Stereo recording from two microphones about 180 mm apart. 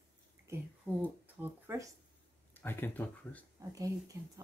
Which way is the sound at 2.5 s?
10° left (ahead or behind).